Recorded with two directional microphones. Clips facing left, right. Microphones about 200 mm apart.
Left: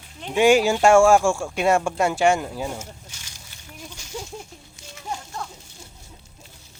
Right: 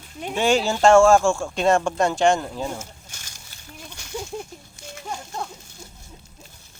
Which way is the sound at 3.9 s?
60° right (ahead or behind).